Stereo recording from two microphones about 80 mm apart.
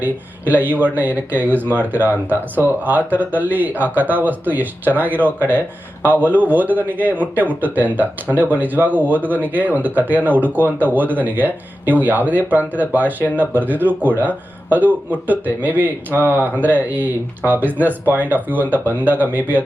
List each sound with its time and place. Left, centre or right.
0.0 s speech: right